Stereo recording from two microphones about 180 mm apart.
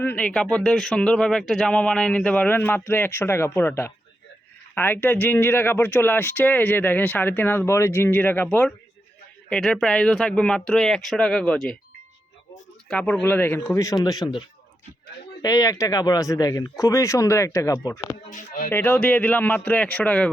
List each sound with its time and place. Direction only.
0.0 s a man's voice: 10° left (ahead or behind)
12.9 s speech: 5° left (ahead or behind)
18.3 s a sound: 50° left (ahead or behind)
18.7 s speech: 10° left (ahead or behind)